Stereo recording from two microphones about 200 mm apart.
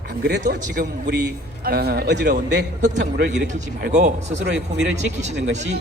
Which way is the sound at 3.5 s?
35° right (ahead or behind).